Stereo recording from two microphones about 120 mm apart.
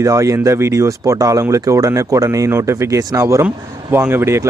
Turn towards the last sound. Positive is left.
turn(degrees=-20)  # may be behind; listen again after turning